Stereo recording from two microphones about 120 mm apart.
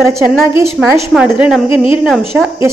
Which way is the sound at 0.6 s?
20° right (ahead or behind).